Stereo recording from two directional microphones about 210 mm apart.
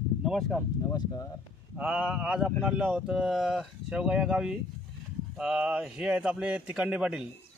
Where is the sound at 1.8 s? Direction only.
5° right (ahead or behind).